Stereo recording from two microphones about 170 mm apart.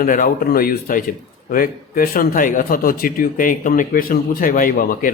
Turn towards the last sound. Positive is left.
turn(degrees=55)  # may be behind; listen again after turning